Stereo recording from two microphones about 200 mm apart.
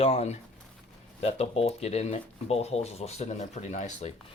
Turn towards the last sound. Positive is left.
turn(degrees=35)  # may be behind; listen again after turning